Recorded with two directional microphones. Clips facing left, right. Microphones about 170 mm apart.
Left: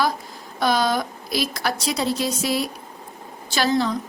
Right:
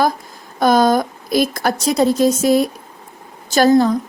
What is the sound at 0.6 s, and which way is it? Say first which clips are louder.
A woman's voice: right 7 dB; 45° right (ahead or behind).